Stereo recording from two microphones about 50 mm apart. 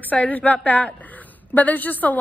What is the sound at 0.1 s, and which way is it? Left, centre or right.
Speech, left.